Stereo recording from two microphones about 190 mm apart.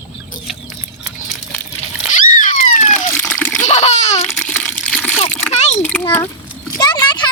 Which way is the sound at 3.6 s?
35° left (ahead or behind).